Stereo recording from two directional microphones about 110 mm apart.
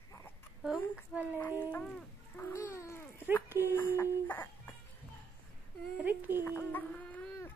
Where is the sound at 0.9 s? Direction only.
15° right (ahead or behind).